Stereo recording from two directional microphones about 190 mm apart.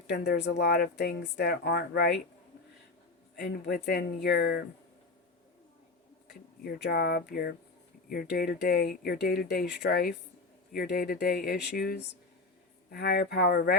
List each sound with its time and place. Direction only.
0.1 s speech: 60° left (ahead or behind)
3.3 s speech: 55° left (ahead or behind)
6.7 s speech: 60° left (ahead or behind)